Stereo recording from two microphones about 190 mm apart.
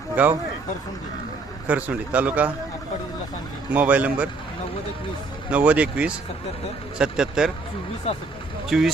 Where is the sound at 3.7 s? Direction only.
5° right (ahead or behind).